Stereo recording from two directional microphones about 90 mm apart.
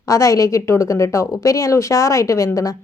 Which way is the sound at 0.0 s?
40° left (ahead or behind).